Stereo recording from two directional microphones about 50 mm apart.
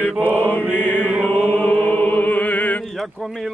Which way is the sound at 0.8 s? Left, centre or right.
Left.